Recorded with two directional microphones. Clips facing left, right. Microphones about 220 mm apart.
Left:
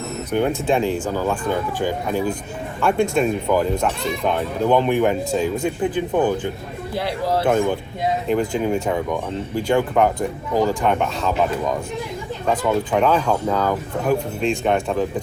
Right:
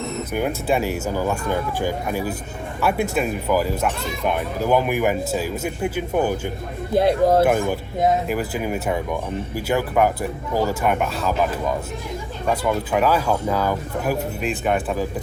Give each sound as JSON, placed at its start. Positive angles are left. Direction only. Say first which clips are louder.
{"t": 0.3, "sound": "speech", "louder": "left 3 dB", "side_deg": -5}
{"t": 5.6, "sound": "speech", "louder": "left 3 dB", "side_deg": 20}
{"t": 6.1, "sound": "speech", "louder": "left 1 dB", "side_deg": -10}
{"t": 6.9, "sound": "speech", "louder": "right 6 dB", "side_deg": -50}
{"t": 7.4, "sound": "speech", "louder": "left 1 dB", "side_deg": -10}
{"t": 12.9, "sound": "speech", "louder": "even", "side_deg": -5}